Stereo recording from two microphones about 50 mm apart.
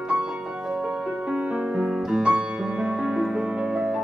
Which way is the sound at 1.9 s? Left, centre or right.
Centre.